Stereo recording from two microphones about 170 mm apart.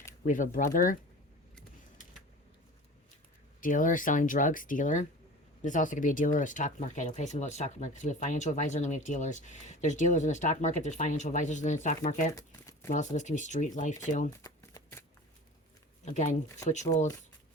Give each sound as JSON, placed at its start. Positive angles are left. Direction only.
{"t": 0.3, "sound": "speech", "side_deg": 50}
{"t": 3.6, "sound": "speech", "side_deg": 50}
{"t": 12.3, "sound": "speech", "side_deg": 20}
{"t": 12.9, "sound": "speech", "side_deg": 45}
{"t": 14.4, "sound": "shuffling cards", "side_deg": 20}
{"t": 16.0, "sound": "speech", "side_deg": 45}